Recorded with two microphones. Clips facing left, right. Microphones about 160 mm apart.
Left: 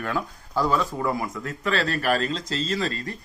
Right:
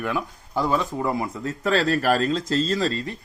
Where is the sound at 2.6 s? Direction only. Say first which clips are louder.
Right 3 dB; 35° right (ahead or behind).